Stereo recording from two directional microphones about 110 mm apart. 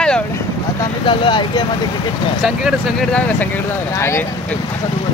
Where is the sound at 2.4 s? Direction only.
Centre (ahead or behind).